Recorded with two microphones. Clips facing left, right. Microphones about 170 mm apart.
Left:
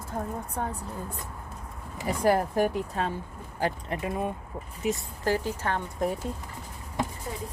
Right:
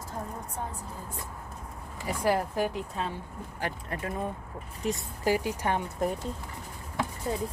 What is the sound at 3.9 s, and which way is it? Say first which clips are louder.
Speech: left 3 dB; 20° left (ahead or behind).